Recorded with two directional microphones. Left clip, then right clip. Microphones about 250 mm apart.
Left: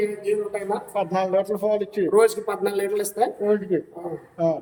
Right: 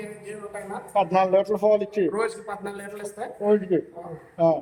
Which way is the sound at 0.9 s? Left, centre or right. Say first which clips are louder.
Right 4 dB; centre.